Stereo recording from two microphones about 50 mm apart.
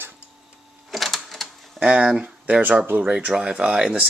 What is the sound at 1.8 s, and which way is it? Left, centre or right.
Speech, right.